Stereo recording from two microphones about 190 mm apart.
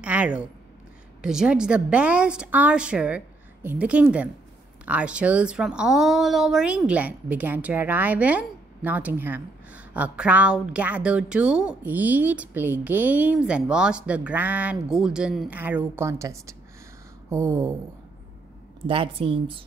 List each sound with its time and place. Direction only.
0.0 s a woman's voice: 5° right (ahead or behind)
18.9 s a woman's voice: 30° right (ahead or behind)